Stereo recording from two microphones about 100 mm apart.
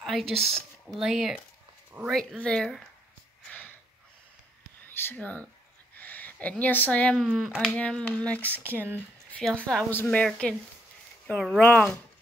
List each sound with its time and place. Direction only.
0.0 s speech: centre (ahead or behind)
2.0 s speech: 15° right (ahead or behind)
2.4 s speech: 5° left (ahead or behind)
3.4 s a sound: 15° left (ahead or behind)
4.9 s speech: 20° left (ahead or behind)
5.9 s a sound: 15° left (ahead or behind)
6.6 s speech: 15° left (ahead or behind)
7.2 s speech: centre (ahead or behind)
7.7 s speech: 10° left (ahead or behind)
8.6 s speech: 20° right (ahead or behind)
9.6 s speech: 10° left (ahead or behind)